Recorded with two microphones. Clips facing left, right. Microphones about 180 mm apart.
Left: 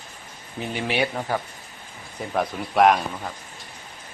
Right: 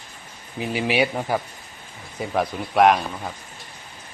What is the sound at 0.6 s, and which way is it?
Speech, 5° right (ahead or behind).